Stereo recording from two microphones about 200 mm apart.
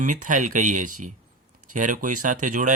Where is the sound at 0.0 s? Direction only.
40° right (ahead or behind).